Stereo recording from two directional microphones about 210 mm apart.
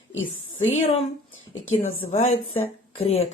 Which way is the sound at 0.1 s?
65° left (ahead or behind).